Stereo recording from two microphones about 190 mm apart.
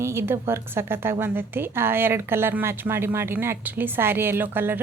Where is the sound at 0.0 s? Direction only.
15° right (ahead or behind).